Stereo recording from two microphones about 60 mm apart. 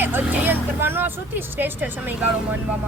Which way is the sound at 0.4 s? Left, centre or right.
Right.